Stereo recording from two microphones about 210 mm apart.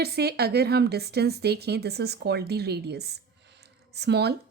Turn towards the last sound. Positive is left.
turn(degrees=-50)  # may be behind; listen again after turning